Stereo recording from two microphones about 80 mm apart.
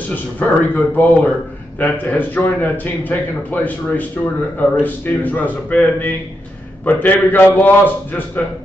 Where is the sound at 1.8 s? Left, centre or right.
Left.